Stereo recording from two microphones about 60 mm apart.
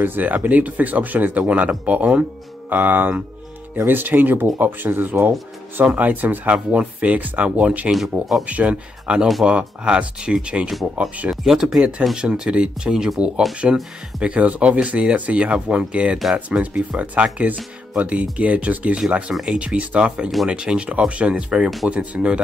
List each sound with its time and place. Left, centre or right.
0.0 s speech: right